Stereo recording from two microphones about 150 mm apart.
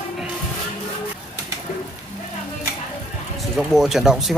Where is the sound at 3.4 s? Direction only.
Centre (ahead or behind).